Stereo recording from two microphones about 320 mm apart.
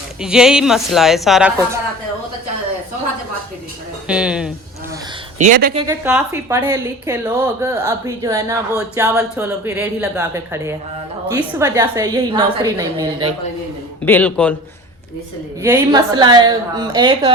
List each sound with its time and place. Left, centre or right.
0.2 s a woman's voice: centre
4.0 s a woman's voice: centre
5.4 s speech: right
5.7 s a woman's voice: centre
14.0 s a woman's voice: centre
15.6 s a woman's voice: centre